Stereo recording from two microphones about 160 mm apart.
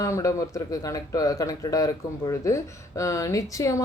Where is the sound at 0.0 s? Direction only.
20° left (ahead or behind).